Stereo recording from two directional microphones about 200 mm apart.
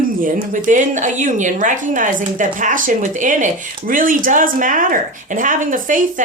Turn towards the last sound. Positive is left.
turn(degrees=-40)  # may be behind; listen again after turning